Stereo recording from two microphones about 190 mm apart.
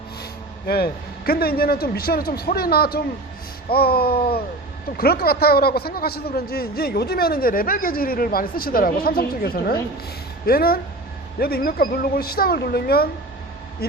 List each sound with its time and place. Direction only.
0.7 s a man's voice: 55° left (ahead or behind)
3.7 s a sound: 55° left (ahead or behind)
4.9 s a man's voice: 55° left (ahead or behind)